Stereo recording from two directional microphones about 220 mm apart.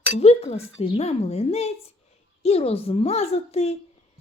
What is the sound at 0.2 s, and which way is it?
A woman's voice, 30° left (ahead or behind).